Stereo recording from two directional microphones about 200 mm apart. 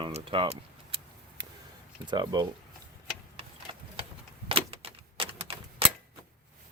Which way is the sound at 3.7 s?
25° right (ahead or behind).